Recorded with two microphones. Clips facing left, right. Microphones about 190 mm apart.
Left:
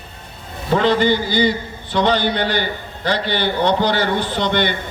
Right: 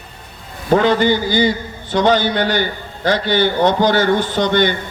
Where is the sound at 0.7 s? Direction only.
45° right (ahead or behind).